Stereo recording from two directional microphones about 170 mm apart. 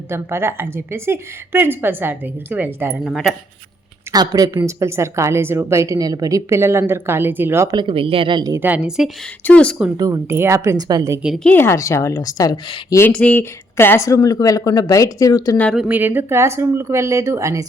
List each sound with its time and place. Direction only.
0.1 s a woman's voice: 15° right (ahead or behind)
4.1 s a woman's voice: 25° right (ahead or behind)
8.6 s a woman's voice: 5° right (ahead or behind)
9.4 s speech: 10° left (ahead or behind)
10.0 s a woman's voice: 15° right (ahead or behind)
11.4 s speech: 15° left (ahead or behind)
12.9 s speech: 10° left (ahead or behind)
15.5 s a woman's voice: 5° left (ahead or behind); by 17.7 s 20° right (ahead or behind)